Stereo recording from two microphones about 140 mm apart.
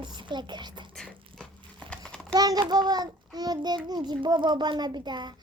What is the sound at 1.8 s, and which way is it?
Crumpling, 5° left (ahead or behind).